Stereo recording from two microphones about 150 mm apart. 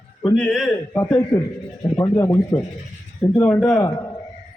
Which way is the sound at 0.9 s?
20° left (ahead or behind).